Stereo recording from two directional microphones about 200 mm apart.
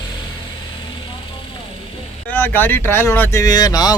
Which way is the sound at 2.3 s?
10° left (ahead or behind).